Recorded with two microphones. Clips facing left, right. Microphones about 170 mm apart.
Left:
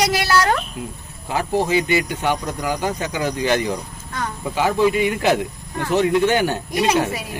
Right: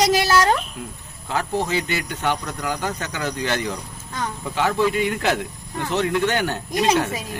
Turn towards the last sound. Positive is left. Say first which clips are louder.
# left 1 dB
turn(degrees=15)  # may be behind; listen again after turning